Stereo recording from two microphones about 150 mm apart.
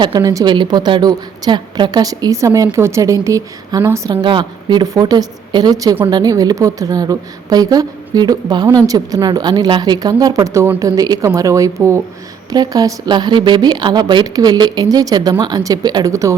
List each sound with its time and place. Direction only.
0.0 s a woman's voice: 25° right (ahead or behind)
4.1 s a woman's voice: 30° right (ahead or behind)